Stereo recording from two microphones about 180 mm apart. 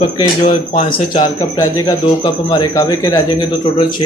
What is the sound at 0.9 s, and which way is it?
Speech, 25° left (ahead or behind).